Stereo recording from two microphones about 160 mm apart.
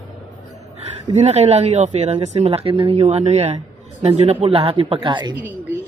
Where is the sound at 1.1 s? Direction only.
40° right (ahead or behind).